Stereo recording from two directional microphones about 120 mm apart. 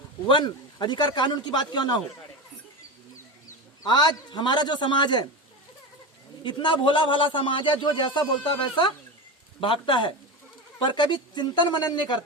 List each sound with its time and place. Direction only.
0.3 s a man's voice: 40° left (ahead or behind)
3.8 s a man's voice: 40° left (ahead or behind)
6.4 s a man's voice: 40° left (ahead or behind)